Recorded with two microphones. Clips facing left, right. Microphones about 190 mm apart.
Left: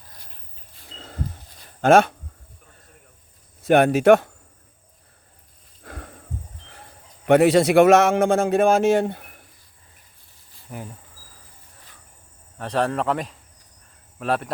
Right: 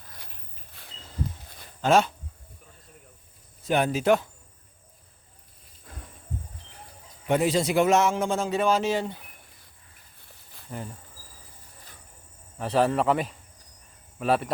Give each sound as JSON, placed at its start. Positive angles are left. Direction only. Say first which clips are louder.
{"t": 0.9, "sound": "a sound", "louder": "left 5 dB", "side_deg": 60}
{"t": 1.8, "sound": "speech", "louder": "left 6 dB", "side_deg": 55}
{"t": 3.6, "sound": "speech", "louder": "left 8 dB", "side_deg": 70}
{"t": 5.8, "sound": "a sound", "louder": "left 8 dB", "side_deg": 70}
{"t": 7.3, "sound": "a man's voice", "louder": "left 8 dB", "side_deg": 75}
{"t": 10.7, "sound": "speech", "louder": "left 1 dB", "side_deg": 5}
{"t": 12.5, "sound": "speech", "louder": "even", "side_deg": -5}